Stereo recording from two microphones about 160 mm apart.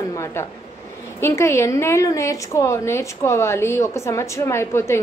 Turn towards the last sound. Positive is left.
turn(degrees=15)  # may be behind; listen again after turning